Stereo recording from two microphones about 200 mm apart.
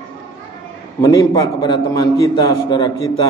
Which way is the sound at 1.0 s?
20° left (ahead or behind).